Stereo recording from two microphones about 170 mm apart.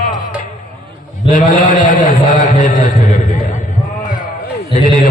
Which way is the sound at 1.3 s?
50° left (ahead or behind).